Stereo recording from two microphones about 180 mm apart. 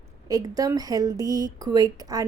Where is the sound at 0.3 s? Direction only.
20° right (ahead or behind).